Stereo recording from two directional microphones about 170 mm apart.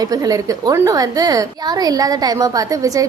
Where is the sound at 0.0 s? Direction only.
20° right (ahead or behind).